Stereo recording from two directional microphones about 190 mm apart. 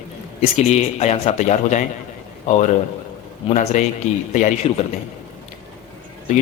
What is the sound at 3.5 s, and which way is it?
A man's voice, 40° left (ahead or behind).